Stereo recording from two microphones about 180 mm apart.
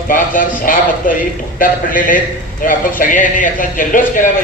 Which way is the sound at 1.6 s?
50° left (ahead or behind).